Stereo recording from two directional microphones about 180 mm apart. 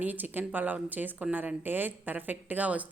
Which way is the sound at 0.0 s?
10° right (ahead or behind).